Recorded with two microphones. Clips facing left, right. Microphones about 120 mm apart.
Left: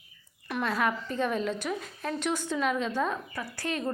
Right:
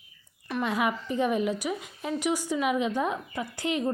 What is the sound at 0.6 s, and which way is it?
A woman's voice, 15° right (ahead or behind).